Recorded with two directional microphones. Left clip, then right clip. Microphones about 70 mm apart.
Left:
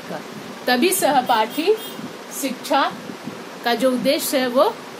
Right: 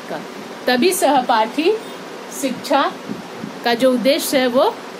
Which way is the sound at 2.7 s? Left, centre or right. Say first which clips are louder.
Right 2 dB; right.